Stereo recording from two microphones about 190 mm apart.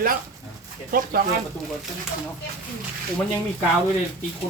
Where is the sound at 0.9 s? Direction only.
50° right (ahead or behind).